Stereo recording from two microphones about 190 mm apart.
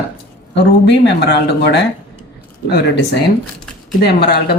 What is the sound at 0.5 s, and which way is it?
Speech, 65° left (ahead or behind).